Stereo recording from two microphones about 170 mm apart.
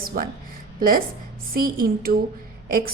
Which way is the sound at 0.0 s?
60° right (ahead or behind).